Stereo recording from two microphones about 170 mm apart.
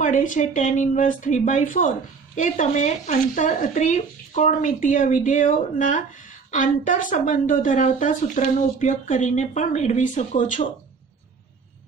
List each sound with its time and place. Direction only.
0.0 s speech: 50° left (ahead or behind)